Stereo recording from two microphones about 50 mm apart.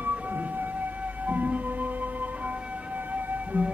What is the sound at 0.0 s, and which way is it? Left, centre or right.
Music, right.